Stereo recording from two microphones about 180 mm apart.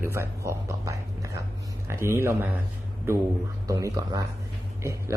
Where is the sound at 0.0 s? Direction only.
15° right (ahead or behind).